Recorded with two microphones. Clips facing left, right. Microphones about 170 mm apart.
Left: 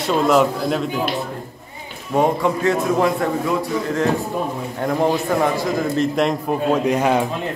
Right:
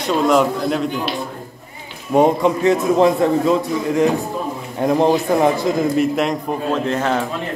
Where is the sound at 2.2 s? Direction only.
20° right (ahead or behind).